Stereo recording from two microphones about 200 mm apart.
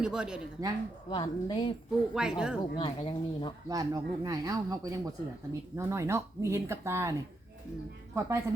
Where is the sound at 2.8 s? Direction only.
25° left (ahead or behind).